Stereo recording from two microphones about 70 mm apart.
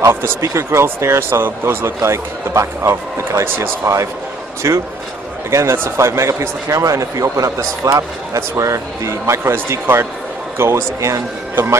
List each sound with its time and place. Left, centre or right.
0.0 s speech: right